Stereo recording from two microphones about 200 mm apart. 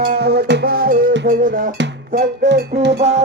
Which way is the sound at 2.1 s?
55° right (ahead or behind).